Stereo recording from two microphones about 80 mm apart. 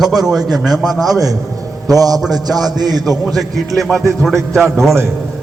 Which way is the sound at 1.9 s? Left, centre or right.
Right.